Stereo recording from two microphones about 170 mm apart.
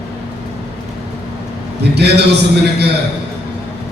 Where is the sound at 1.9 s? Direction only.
75° right (ahead or behind).